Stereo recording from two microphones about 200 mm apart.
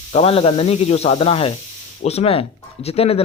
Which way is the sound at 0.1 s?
30° left (ahead or behind).